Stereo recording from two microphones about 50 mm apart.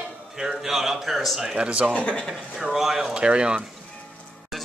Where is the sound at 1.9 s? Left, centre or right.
Left.